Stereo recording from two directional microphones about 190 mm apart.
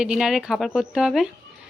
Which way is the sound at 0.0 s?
5° right (ahead or behind).